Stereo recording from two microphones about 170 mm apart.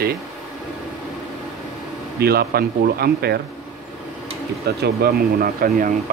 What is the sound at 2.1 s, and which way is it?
Speech, 65° right (ahead or behind).